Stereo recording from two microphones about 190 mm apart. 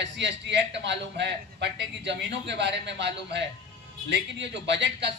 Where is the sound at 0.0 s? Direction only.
70° right (ahead or behind).